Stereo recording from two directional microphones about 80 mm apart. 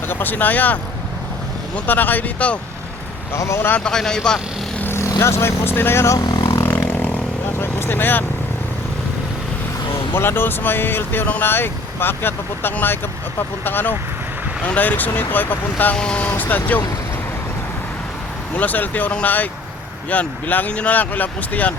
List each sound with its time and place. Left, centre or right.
0.1 s speech: left
3.3 s speech: left
3.8 s speech: centre
4.8 s speech: left
6.1 s vehicle: left
6.6 s vehicle: left
7.6 s speech: left
10.1 s speech: left
18.5 s speech: left